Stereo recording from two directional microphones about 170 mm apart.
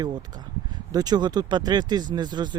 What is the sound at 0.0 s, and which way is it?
Speech, 25° right (ahead or behind).